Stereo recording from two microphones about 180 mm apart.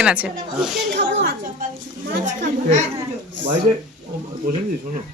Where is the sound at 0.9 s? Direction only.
75° right (ahead or behind).